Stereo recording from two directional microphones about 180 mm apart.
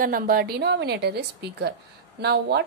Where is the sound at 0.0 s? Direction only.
55° right (ahead or behind).